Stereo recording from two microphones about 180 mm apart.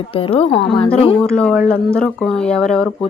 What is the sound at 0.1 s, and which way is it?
Speech, 30° left (ahead or behind).